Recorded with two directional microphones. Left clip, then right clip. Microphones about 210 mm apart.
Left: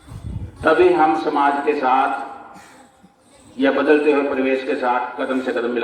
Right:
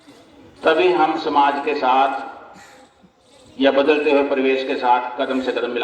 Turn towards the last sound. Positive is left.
turn(degrees=-40)  # may be behind; listen again after turning